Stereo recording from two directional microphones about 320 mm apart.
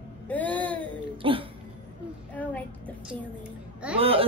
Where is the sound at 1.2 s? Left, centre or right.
Centre.